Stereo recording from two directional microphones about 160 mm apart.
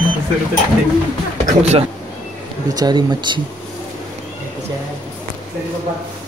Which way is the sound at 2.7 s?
25° right (ahead or behind).